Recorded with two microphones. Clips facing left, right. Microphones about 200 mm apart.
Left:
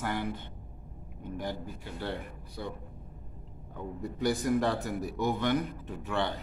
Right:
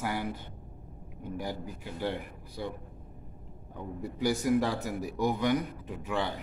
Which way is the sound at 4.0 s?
10° right (ahead or behind).